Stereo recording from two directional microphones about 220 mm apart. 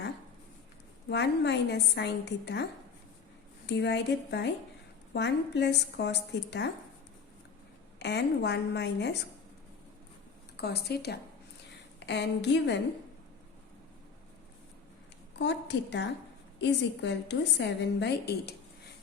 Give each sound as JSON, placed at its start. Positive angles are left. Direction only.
{"t": 1.1, "sound": "a woman's voice", "side_deg": 50}
{"t": 3.7, "sound": "a woman's voice", "side_deg": 50}
{"t": 7.9, "sound": "a woman's voice", "side_deg": 50}
{"t": 10.6, "sound": "a woman's voice", "side_deg": 45}
{"t": 15.4, "sound": "a woman's voice", "side_deg": 50}